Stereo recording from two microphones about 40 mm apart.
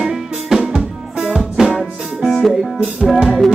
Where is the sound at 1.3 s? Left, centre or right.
Centre.